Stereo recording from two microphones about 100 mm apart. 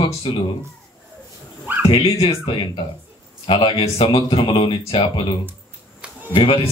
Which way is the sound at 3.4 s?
65° left (ahead or behind).